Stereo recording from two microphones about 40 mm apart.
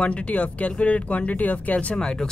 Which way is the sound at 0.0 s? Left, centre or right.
Left.